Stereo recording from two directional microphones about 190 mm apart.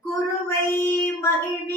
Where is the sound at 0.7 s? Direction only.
10° left (ahead or behind).